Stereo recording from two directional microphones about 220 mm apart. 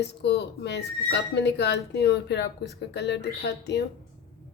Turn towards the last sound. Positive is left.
turn(degrees=50)  # may be behind; listen again after turning